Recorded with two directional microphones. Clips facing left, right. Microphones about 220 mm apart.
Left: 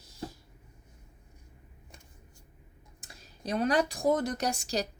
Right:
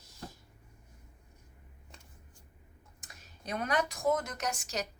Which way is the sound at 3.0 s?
30° left (ahead or behind).